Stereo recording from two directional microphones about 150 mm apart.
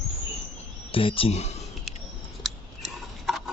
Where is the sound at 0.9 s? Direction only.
35° left (ahead or behind).